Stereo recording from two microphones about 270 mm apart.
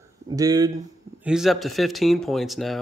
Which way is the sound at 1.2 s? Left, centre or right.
Centre.